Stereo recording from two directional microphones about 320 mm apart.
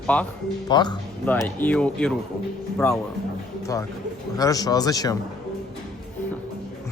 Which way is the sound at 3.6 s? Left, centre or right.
Centre.